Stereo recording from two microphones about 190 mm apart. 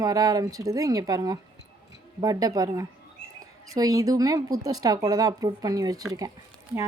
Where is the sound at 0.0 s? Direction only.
20° right (ahead or behind).